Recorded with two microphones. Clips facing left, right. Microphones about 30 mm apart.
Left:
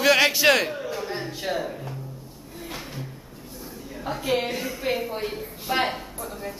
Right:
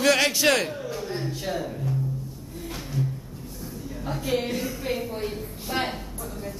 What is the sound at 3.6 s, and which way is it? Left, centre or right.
A woman's voice, centre.